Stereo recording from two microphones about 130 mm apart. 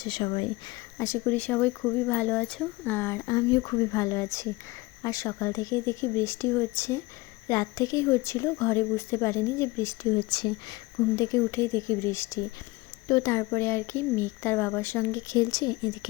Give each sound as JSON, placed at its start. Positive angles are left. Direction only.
{"t": 0.0, "sound": "speech", "side_deg": 40}
{"t": 0.9, "sound": "speech", "side_deg": 20}
{"t": 2.9, "sound": "speech", "side_deg": 20}
{"t": 10.2, "sound": "speech", "side_deg": 35}
{"t": 11.2, "sound": "speech", "side_deg": 25}